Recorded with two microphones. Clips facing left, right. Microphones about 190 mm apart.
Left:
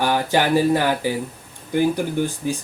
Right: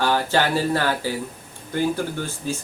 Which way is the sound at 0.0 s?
15° left (ahead or behind).